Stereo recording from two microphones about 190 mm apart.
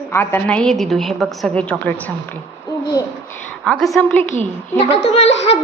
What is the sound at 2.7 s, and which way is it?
Hoot, 20° left (ahead or behind).